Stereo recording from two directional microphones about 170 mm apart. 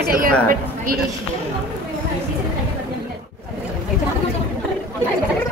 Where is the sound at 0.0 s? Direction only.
60° right (ahead or behind).